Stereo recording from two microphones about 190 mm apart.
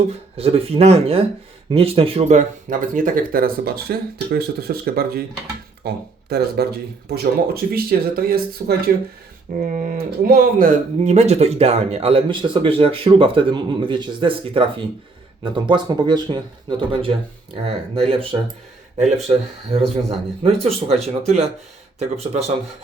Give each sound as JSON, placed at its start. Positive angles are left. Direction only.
{"t": 0.1, "sound": "speech", "side_deg": -30}
{"t": 11.0, "sound": "speech", "side_deg": -35}
{"t": 20.8, "sound": "speech", "side_deg": -35}